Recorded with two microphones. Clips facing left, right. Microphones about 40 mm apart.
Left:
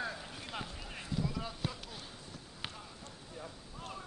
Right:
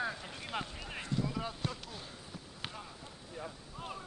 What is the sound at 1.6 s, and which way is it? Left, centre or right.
Basketball bounce, centre.